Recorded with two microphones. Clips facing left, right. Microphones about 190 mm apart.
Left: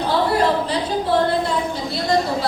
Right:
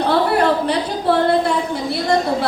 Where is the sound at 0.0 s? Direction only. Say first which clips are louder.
Right 2 dB; 60° right (ahead or behind).